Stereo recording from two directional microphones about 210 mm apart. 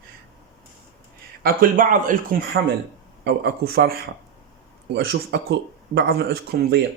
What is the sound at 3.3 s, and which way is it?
Speech, 50° right (ahead or behind).